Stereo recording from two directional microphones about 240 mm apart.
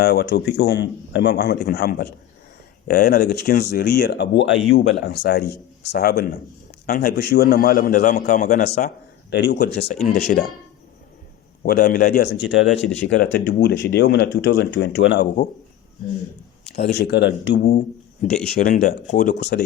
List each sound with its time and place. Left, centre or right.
0.0 s a man's voice: left
11.6 s a man's voice: left
16.7 s a man's voice: left